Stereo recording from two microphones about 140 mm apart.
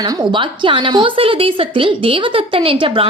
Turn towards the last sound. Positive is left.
turn(degrees=-40)  # may be behind; listen again after turning